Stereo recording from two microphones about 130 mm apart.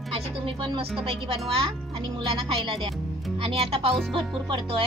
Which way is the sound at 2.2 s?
40° right (ahead or behind).